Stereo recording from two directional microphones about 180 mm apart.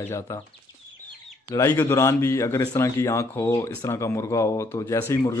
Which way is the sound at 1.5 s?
15° left (ahead or behind).